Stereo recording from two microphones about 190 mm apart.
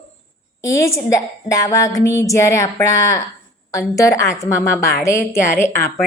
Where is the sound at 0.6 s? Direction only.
15° left (ahead or behind).